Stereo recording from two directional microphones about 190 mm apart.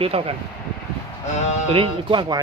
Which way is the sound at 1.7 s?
25° right (ahead or behind).